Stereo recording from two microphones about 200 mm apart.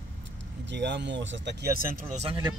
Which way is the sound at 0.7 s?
60° right (ahead or behind).